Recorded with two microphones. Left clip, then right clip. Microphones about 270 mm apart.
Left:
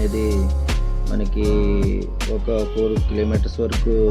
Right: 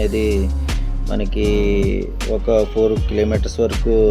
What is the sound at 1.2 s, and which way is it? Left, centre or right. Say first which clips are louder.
Speech: right 3 dB; centre.